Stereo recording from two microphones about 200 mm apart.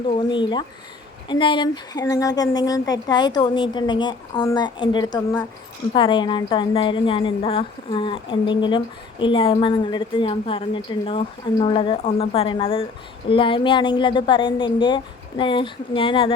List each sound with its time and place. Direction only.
0.1 s a woman's voice: 25° left (ahead or behind)